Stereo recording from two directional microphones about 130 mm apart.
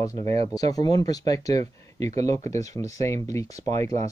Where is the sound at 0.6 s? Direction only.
30° left (ahead or behind).